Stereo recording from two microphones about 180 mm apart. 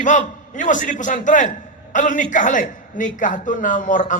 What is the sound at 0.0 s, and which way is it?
A man's voice, 45° left (ahead or behind).